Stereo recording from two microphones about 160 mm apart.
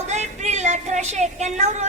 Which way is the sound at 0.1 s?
45° right (ahead or behind).